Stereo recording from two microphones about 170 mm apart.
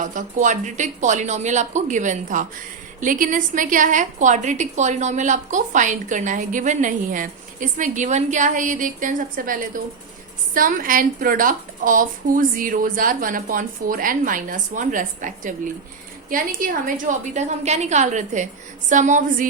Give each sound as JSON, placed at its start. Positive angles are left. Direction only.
{"t": 0.1, "sound": "a woman's voice", "side_deg": -50}